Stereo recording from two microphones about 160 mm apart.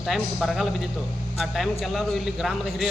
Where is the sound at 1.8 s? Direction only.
Centre (ahead or behind).